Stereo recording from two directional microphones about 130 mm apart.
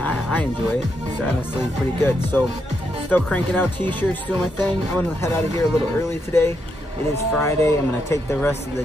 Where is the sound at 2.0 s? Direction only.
15° left (ahead or behind).